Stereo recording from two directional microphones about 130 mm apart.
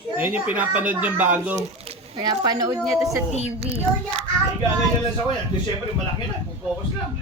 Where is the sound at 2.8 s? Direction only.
Centre (ahead or behind).